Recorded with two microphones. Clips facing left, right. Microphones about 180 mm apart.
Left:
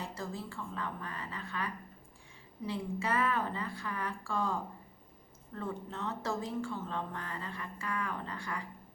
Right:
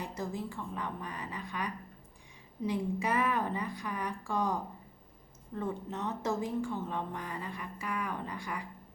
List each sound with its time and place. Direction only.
0.0 s speech: 20° right (ahead or behind)